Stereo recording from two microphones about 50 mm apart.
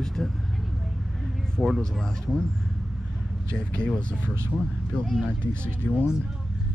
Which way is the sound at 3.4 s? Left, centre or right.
Centre.